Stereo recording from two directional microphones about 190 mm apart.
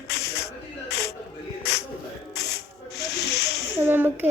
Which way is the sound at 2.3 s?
60° left (ahead or behind).